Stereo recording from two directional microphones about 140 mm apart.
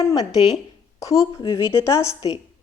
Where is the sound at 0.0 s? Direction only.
25° left (ahead or behind).